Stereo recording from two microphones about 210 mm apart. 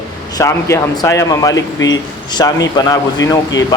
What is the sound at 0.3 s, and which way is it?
Speech, 15° left (ahead or behind).